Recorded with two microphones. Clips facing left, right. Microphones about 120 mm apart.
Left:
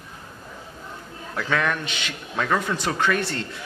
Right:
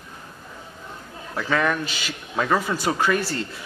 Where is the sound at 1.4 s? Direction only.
Centre (ahead or behind).